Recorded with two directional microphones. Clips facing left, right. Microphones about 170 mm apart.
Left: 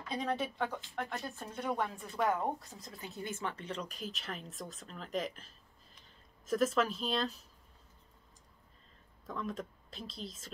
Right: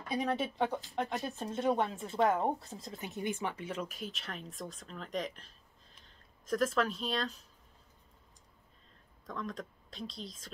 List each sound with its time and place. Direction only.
0.4 s a woman's voice: 20° right (ahead or behind); by 7.3 s centre (ahead or behind)
9.2 s speech: 5° left (ahead or behind)